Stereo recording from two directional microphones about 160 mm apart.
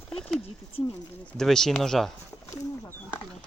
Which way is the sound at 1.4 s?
5° left (ahead or behind).